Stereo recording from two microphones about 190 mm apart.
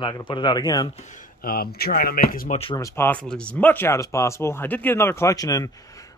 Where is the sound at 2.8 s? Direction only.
15° left (ahead or behind).